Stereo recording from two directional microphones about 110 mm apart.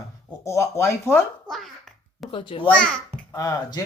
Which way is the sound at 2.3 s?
50° left (ahead or behind).